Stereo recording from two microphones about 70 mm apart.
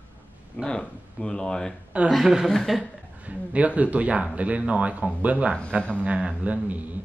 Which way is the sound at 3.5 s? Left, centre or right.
Centre.